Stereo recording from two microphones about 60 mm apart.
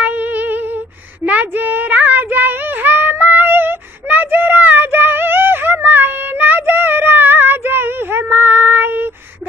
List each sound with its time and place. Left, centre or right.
0.0 s humming: right
1.2 s child singing: right